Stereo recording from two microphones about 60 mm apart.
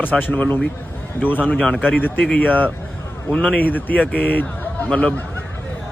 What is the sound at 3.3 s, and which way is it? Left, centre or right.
Speech, centre.